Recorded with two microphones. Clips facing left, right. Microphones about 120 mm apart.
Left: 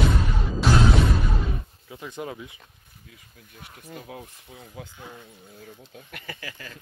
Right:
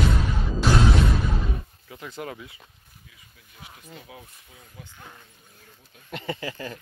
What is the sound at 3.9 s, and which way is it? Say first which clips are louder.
Speech: left 6 dB; 50° left (ahead or behind).